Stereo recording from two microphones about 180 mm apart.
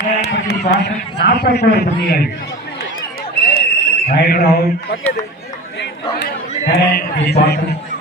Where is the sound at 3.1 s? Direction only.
55° left (ahead or behind).